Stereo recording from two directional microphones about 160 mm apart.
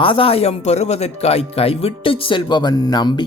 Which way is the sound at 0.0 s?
35° left (ahead or behind).